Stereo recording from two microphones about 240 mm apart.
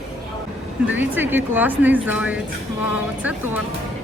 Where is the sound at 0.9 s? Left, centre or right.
Centre.